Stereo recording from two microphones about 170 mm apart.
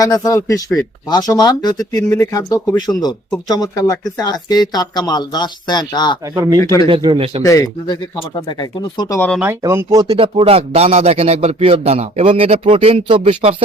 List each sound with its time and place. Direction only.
0.0 s speech: 20° left (ahead or behind)
6.3 s speech: 20° right (ahead or behind)
6.6 s speech: 20° left (ahead or behind)
6.8 s speech: 30° right (ahead or behind)
7.4 s speech: 20° left (ahead or behind)
9.0 s speech: 15° left (ahead or behind)
9.4 s speech: 15° right (ahead or behind); by 13.6 s 35° right (ahead or behind)